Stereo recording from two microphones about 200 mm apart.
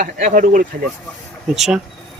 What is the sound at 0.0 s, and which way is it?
Speech, 40° right (ahead or behind).